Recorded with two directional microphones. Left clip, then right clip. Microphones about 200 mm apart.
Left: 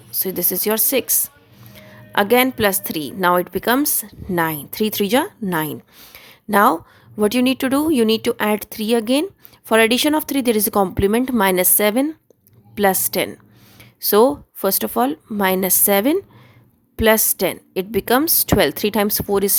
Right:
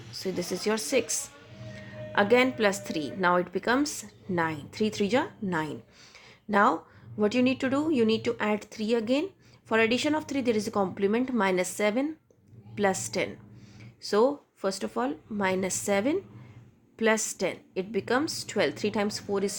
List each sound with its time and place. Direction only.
0.2 s a woman's voice: 40° left (ahead or behind)